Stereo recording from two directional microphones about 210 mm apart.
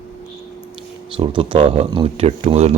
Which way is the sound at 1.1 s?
25° right (ahead or behind).